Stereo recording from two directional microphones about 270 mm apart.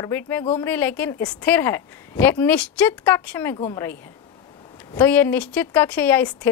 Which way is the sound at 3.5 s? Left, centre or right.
Centre.